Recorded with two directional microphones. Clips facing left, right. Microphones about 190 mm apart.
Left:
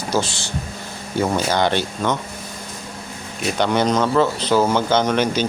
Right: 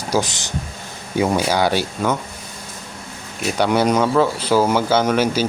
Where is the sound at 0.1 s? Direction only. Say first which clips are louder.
Right 2 dB; 15° right (ahead or behind).